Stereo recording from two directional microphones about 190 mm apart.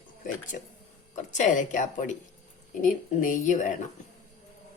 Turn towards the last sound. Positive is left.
turn(degrees=40)  # may be behind; listen again after turning